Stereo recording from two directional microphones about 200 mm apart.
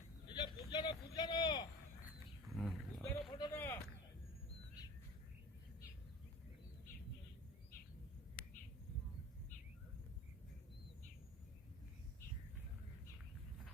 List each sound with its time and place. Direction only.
0.3 s vehicle: 20° left (ahead or behind)
2.5 s roaring cats: centre (ahead or behind)
3.5 s a sound: 10° left (ahead or behind)